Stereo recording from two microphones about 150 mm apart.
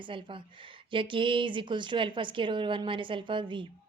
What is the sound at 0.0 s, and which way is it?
A woman's voice, 35° right (ahead or behind).